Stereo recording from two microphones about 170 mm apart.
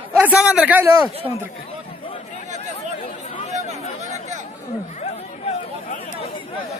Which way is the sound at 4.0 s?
45° right (ahead or behind).